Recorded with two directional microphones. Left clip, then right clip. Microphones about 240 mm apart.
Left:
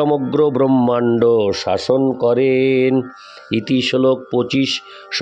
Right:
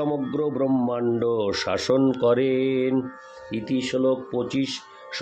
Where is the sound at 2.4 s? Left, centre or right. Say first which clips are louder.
Left 8 dB; left.